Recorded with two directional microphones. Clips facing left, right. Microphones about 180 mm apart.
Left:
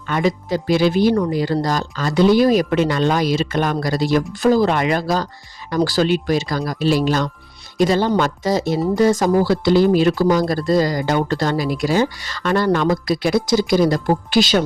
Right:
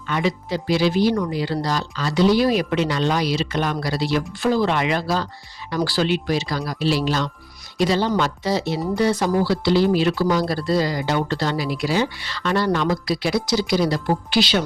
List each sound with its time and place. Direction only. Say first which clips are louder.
0.1 s speech: left 4 dB; 45° left (ahead or behind)